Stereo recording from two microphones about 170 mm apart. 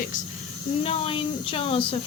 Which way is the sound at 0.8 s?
35° left (ahead or behind).